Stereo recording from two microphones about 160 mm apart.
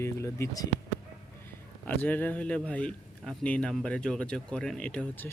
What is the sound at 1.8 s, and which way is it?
Speech, 10° left (ahead or behind).